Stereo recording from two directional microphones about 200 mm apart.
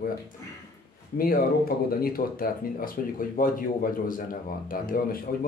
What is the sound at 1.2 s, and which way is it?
Speech, 45° left (ahead or behind).